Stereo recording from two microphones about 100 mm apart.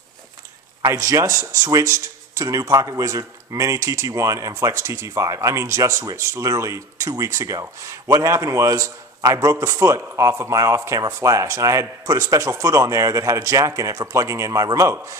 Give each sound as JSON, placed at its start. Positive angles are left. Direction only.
{"t": 0.9, "sound": "speech", "side_deg": -30}